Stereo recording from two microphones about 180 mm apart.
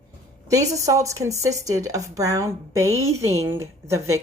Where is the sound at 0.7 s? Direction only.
15° right (ahead or behind).